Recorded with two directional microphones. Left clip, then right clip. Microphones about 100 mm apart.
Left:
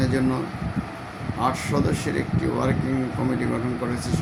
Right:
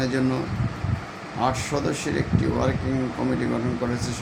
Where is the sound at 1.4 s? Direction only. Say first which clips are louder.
Even; 5° right (ahead or behind).